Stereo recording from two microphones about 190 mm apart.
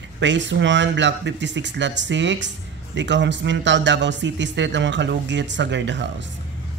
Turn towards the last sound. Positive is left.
turn(degrees=-70)  # may be behind; listen again after turning